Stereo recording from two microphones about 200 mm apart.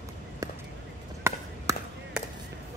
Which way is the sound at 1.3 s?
15° right (ahead or behind).